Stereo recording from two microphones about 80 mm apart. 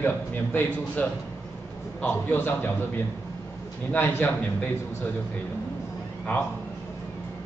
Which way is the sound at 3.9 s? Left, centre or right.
Left.